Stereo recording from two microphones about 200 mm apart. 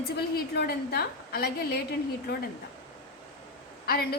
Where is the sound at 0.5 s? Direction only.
55° left (ahead or behind).